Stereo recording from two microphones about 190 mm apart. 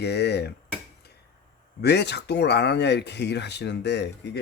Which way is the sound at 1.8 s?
60° left (ahead or behind).